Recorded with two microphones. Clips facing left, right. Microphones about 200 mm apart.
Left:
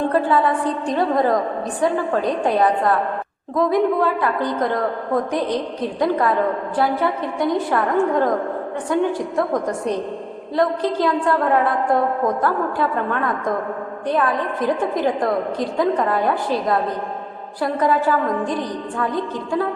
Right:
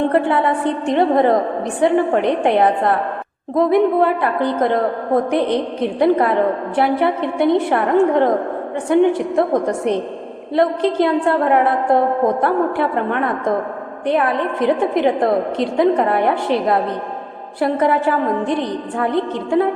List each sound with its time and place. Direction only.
0.1 s a woman's voice: 25° right (ahead or behind)